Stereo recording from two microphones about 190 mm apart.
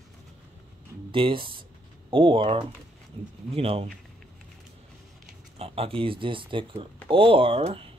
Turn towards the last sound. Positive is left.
turn(degrees=-30)  # may be behind; listen again after turning